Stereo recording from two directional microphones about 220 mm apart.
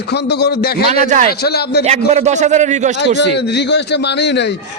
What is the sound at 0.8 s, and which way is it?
Speech, 30° right (ahead or behind).